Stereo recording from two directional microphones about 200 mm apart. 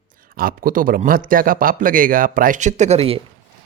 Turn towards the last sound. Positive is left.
turn(degrees=-30)  # may be behind; listen again after turning